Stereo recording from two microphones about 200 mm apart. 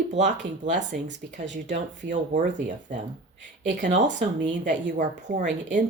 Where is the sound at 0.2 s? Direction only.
40° right (ahead or behind).